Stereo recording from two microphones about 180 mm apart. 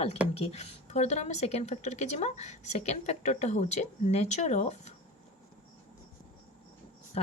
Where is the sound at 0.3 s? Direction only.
35° left (ahead or behind).